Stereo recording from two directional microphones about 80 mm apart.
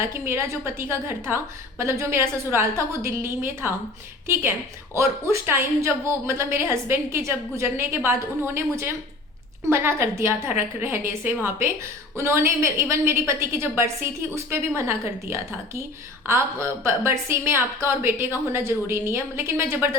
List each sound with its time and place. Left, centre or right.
0.0 s a woman's voice: right
4.9 s a woman's voice: right